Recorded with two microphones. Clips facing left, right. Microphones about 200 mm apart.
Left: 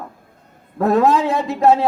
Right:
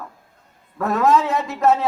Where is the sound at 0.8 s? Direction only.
30° left (ahead or behind).